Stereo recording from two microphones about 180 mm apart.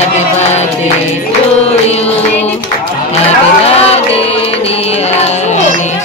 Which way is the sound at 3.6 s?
35° left (ahead or behind).